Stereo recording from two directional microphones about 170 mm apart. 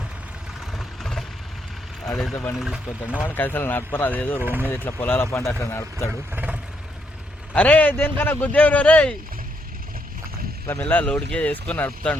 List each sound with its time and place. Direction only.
0.7 s vehicle: centre (ahead or behind)
2.3 s speech: 15° left (ahead or behind)
2.6 s speech: 5° right (ahead or behind)
3.2 s speech: 10° left (ahead or behind)
4.4 s speech: 10° right (ahead or behind)
4.7 s speech: 10° left (ahead or behind)
6.1 s speech: 5° right (ahead or behind)
7.5 s speech: 10° left (ahead or behind)
10.7 s speech: 10° left (ahead or behind)